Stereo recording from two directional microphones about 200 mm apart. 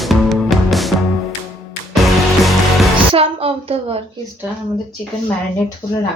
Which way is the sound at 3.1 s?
30° right (ahead or behind).